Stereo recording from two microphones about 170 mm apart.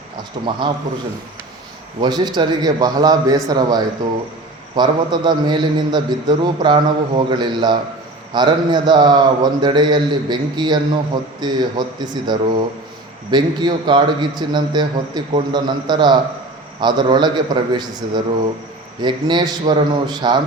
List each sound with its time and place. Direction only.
0.4 s a man's voice: 30° right (ahead or behind)
2.0 s a man's voice: 25° right (ahead or behind)